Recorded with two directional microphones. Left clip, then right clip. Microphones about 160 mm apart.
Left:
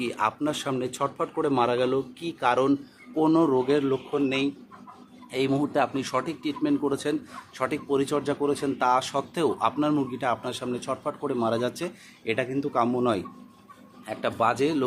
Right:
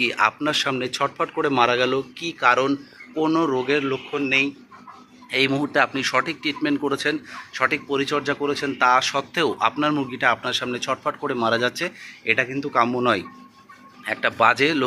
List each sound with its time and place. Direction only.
0.0 s a man's voice: 10° left (ahead or behind); by 4.4 s 30° left (ahead or behind)
5.3 s a man's voice: 15° left (ahead or behind)
10.9 s speech: centre (ahead or behind)
11.3 s a man's voice: 10° left (ahead or behind)
13.0 s a man's voice: 10° left (ahead or behind)